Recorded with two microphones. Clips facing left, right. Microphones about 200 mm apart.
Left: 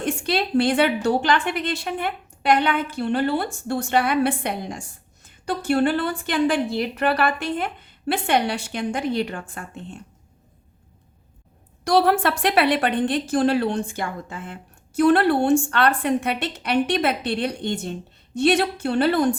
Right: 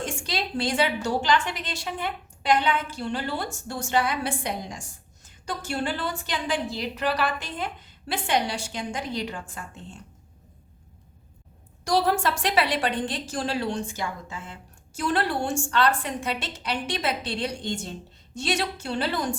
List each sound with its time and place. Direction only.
0.0 s a sound: 60° left (ahead or behind)
1.0 s a woman's voice: 60° left (ahead or behind)
11.9 s a woman's voice: 60° left (ahead or behind)